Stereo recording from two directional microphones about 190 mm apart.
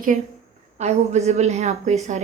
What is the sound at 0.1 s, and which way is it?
Speech, 40° right (ahead or behind).